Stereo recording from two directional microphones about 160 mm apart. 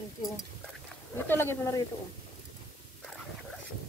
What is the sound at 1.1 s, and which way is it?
Speech, 15° left (ahead or behind).